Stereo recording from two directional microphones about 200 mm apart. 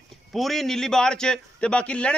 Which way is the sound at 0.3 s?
Centre (ahead or behind).